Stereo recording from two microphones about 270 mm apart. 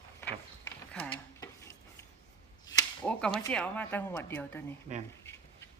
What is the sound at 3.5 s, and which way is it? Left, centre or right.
A woman's voice, centre.